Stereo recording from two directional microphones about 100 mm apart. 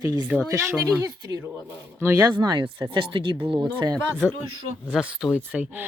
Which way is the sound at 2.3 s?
50° right (ahead or behind).